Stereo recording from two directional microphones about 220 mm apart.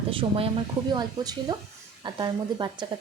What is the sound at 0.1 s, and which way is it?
Speech, 25° right (ahead or behind).